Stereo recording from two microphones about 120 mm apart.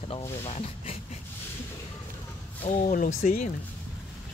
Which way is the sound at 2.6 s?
85° left.